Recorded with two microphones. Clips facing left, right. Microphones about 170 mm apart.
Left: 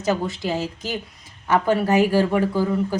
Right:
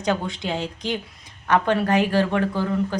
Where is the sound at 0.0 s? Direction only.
5° left (ahead or behind).